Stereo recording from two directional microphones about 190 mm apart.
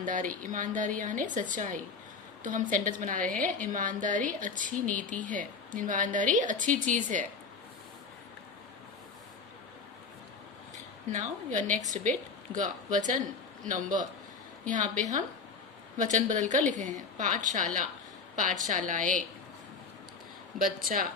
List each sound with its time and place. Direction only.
0.0 s a woman's voice: 45° right (ahead or behind)
11.1 s a woman's voice: 40° right (ahead or behind)
18.7 s a woman's voice: 40° right (ahead or behind)
20.6 s a woman's voice: 45° right (ahead or behind)